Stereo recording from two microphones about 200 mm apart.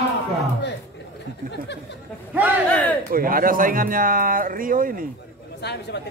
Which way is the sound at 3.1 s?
45° right (ahead or behind).